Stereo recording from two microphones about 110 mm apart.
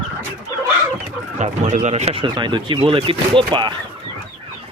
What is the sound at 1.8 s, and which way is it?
Speech, 75° right (ahead or behind).